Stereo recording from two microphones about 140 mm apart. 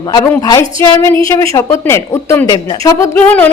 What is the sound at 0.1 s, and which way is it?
A woman's voice, 25° left (ahead or behind).